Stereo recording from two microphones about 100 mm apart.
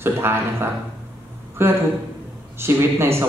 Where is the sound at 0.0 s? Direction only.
25° right (ahead or behind).